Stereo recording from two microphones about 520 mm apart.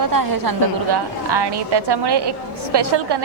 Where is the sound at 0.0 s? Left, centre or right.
Right.